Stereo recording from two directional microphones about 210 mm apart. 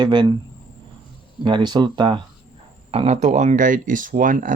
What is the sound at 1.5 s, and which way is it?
Speech, 20° right (ahead or behind).